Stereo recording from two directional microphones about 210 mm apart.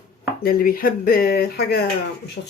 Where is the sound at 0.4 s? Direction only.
45° left (ahead or behind).